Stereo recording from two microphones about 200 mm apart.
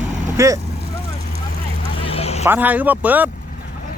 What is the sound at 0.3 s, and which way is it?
Speech, 15° right (ahead or behind).